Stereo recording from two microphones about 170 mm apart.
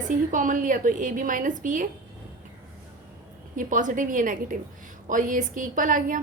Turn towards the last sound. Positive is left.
turn(degrees=-50)  # may be behind; listen again after turning